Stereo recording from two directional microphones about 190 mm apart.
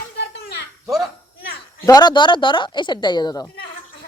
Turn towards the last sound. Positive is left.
turn(degrees=20)  # may be behind; listen again after turning